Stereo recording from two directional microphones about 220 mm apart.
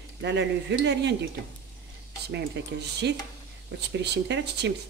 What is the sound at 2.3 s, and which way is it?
Speech, 50° right (ahead or behind).